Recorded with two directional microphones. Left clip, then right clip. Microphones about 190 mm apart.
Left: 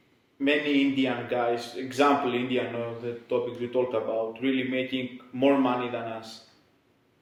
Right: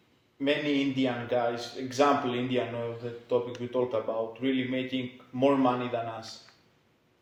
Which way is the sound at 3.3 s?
40° right (ahead or behind).